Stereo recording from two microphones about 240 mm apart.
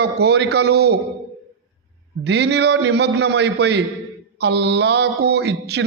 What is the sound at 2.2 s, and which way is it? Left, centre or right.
A man's voice, right.